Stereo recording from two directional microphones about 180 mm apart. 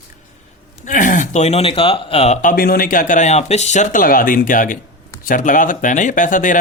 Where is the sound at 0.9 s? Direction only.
45° left (ahead or behind).